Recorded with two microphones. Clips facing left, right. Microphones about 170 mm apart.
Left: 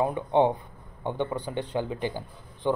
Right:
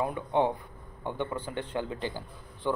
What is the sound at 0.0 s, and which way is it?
A man's voice, 20° left (ahead or behind).